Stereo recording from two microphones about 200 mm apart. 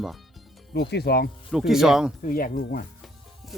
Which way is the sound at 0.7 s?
55° left (ahead or behind).